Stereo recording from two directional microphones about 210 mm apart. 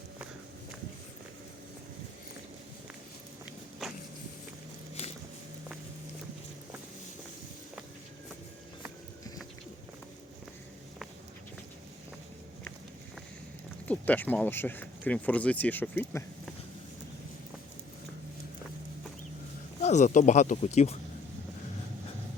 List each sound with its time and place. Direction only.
13.8 s speech: 5° left (ahead or behind)
19.8 s speech: 35° left (ahead or behind)